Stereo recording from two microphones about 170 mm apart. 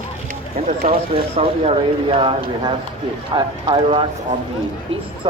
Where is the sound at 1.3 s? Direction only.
35° right (ahead or behind).